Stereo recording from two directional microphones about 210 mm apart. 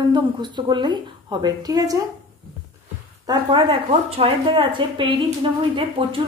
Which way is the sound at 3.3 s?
25° right (ahead or behind).